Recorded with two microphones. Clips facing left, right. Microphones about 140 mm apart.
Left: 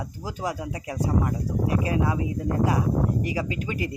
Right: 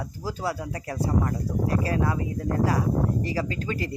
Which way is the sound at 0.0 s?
15° left (ahead or behind).